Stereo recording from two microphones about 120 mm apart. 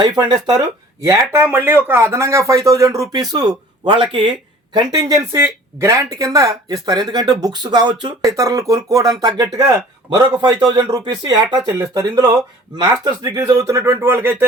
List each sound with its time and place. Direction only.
1.0 s speech: 25° right (ahead or behind)